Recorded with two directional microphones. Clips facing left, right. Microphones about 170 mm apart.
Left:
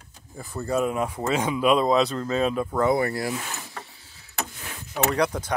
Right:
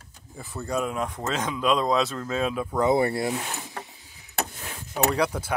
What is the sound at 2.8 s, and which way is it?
Speech, 25° right (ahead or behind).